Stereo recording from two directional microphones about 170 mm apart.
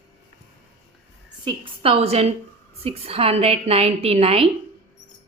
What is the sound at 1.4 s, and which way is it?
A woman's voice, 30° right (ahead or behind).